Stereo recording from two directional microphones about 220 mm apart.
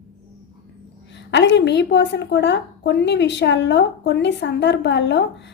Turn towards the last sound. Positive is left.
turn(degrees=50)  # may be behind; listen again after turning